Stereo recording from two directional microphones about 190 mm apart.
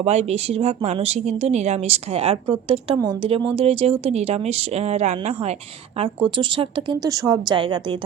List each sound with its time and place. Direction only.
0.0 s a woman's voice: 35° right (ahead or behind)